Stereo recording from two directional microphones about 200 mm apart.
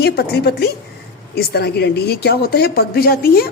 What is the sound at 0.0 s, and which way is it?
A woman's voice, 55° left (ahead or behind).